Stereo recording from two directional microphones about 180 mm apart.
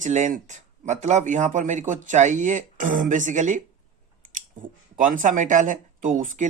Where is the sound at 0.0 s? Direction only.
40° right (ahead or behind).